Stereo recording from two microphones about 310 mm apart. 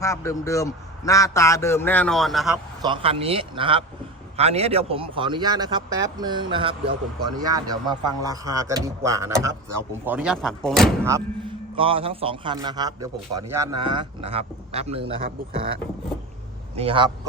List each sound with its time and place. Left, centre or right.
0.0 s a man's voice: centre
2.8 s a man's voice: centre
11.1 s a man's voice: centre
16.7 s a man's voice: centre